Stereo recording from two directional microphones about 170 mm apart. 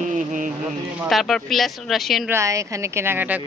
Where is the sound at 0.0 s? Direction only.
50° right (ahead or behind).